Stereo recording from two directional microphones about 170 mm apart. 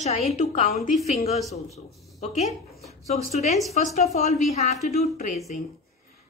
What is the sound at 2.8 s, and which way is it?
Speech, 40° left (ahead or behind).